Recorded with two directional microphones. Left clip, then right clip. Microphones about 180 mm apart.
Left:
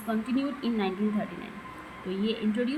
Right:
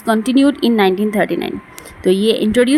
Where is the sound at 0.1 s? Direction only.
65° right (ahead or behind).